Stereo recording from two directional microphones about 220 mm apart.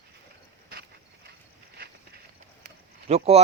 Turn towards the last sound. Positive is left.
turn(degrees=-30)  # may be behind; listen again after turning